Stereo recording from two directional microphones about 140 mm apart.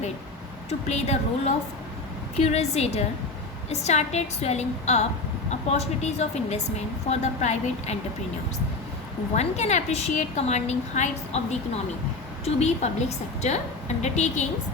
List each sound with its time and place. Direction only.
0.7 s a woman's voice: 50° left (ahead or behind)
9.3 s a woman's voice: 55° left (ahead or behind)
12.5 s a woman's voice: 50° left (ahead or behind)